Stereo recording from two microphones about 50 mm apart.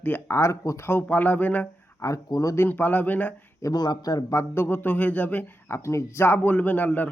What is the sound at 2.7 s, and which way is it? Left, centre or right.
Speech, left.